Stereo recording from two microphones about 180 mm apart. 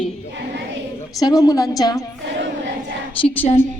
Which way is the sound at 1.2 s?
20° left (ahead or behind).